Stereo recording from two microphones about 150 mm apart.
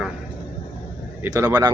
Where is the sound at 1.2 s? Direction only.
20° right (ahead or behind).